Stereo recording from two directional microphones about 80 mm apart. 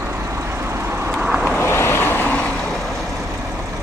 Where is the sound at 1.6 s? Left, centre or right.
Left.